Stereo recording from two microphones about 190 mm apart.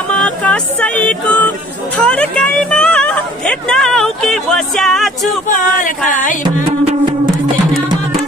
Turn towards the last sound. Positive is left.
turn(degrees=45)  # may be behind; listen again after turning